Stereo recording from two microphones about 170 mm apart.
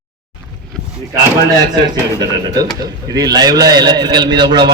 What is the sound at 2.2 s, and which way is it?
A man's voice, 25° right (ahead or behind).